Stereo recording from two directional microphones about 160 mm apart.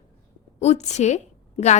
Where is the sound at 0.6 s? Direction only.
45° left (ahead or behind).